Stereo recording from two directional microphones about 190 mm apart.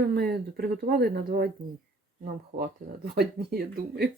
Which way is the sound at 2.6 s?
55° right (ahead or behind).